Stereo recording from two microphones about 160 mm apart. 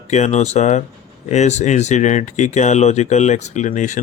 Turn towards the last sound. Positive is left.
turn(degrees=50)  # may be behind; listen again after turning